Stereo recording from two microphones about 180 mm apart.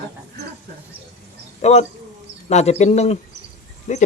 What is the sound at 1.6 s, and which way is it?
A man's voice, 35° left (ahead or behind).